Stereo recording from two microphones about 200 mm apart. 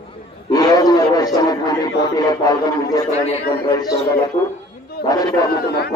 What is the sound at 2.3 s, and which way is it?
Speech, 20° left (ahead or behind).